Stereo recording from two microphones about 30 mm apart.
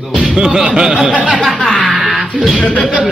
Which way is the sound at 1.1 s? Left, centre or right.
Right.